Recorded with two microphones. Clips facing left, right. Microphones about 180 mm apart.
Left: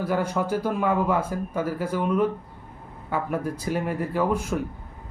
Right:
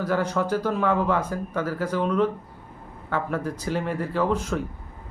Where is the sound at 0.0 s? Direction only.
10° left (ahead or behind).